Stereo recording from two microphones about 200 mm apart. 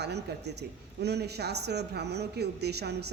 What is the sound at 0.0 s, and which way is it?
A man's voice, 55° right (ahead or behind).